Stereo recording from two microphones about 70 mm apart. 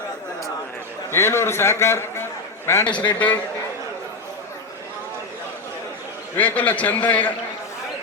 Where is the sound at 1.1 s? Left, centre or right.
Left.